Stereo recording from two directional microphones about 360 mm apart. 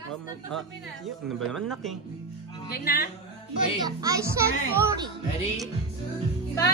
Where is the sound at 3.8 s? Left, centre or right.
Centre.